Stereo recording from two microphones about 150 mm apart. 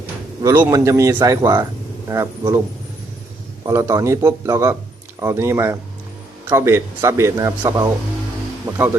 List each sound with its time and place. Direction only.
0.4 s a man's voice: 15° right (ahead or behind)
3.7 s a man's voice: 20° right (ahead or behind)